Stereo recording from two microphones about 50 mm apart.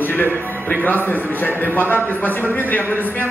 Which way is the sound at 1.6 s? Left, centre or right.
Left.